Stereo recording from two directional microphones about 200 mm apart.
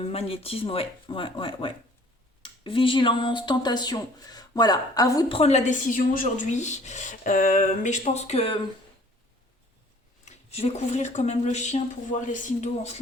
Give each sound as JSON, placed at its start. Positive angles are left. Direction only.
{"t": 0.0, "sound": "speech", "side_deg": 30}
{"t": 5.4, "sound": "a woman's voice", "side_deg": 30}
{"t": 10.2, "sound": "a woman's voice", "side_deg": 30}